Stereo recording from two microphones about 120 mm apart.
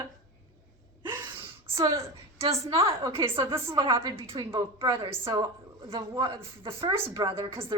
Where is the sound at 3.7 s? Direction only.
45° right (ahead or behind).